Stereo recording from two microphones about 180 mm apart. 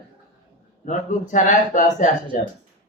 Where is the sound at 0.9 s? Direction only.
45° left (ahead or behind).